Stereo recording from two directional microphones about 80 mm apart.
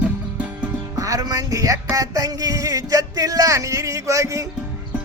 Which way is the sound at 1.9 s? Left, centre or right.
Right.